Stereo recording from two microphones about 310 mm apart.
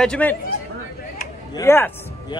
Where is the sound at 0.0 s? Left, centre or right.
Centre.